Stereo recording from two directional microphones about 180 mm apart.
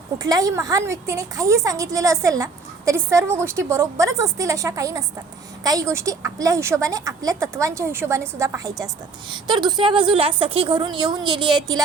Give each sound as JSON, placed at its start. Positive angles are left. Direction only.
{"t": 0.2, "sound": "a woman's voice", "side_deg": -20}